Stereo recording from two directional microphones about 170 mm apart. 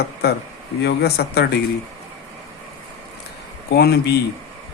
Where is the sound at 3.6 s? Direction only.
70° left (ahead or behind).